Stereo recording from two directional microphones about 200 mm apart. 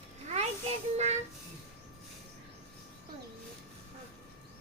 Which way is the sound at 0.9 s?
35° right (ahead or behind).